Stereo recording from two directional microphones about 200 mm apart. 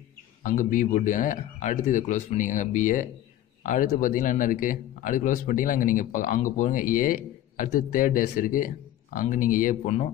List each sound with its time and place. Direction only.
0.4 s a man's voice: 40° left (ahead or behind)